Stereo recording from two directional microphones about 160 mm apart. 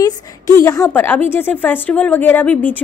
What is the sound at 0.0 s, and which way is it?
A woman's voice, 15° left (ahead or behind).